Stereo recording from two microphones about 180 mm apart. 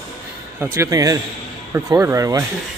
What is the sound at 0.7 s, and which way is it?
A man's voice, 20° right (ahead or behind).